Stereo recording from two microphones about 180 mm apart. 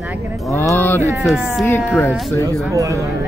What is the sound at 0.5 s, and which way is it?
Speech, 10° left (ahead or behind).